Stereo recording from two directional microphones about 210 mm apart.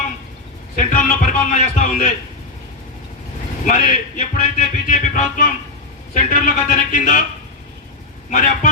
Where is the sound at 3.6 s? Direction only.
35° left (ahead or behind).